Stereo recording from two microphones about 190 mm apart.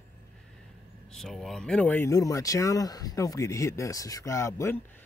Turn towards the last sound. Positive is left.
turn(degrees=15)  # may be behind; listen again after turning